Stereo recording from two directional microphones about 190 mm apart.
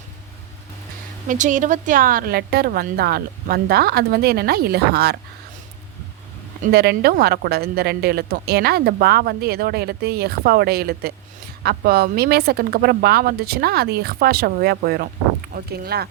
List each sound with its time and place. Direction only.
1.3 s a woman's voice: 40° right (ahead or behind)
6.6 s a woman's voice: 55° right (ahead or behind)